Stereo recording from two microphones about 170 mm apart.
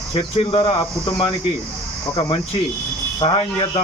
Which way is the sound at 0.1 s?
30° left (ahead or behind).